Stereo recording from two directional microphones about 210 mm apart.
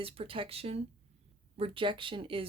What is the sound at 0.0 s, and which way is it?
A woman's voice, 25° right (ahead or behind).